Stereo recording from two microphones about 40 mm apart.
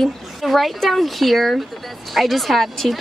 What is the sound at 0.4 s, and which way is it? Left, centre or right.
Speech, centre.